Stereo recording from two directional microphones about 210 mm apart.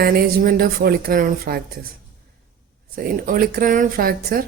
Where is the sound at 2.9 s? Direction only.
40° right (ahead or behind).